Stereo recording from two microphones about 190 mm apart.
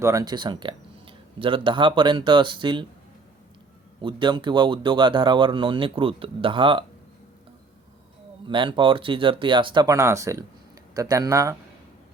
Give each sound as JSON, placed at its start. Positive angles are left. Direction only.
{"t": 0.0, "sound": "speech", "side_deg": -15}
{"t": 4.0, "sound": "speech", "side_deg": -25}
{"t": 8.4, "sound": "speech", "side_deg": -25}